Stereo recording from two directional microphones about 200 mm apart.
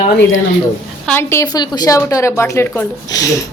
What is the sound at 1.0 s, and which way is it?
A woman's voice, 10° left (ahead or behind).